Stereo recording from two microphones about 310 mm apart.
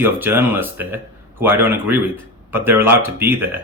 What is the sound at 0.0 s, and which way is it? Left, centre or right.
Speech, centre.